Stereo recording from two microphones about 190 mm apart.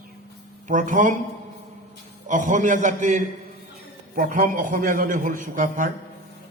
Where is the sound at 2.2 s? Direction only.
40° right (ahead or behind).